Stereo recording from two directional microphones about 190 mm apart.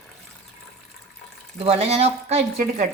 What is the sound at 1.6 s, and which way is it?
Speech, 30° right (ahead or behind).